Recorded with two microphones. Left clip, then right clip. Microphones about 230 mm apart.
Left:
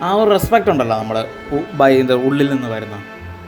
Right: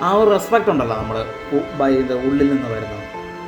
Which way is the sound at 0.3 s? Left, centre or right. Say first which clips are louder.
Left 2 dB; left.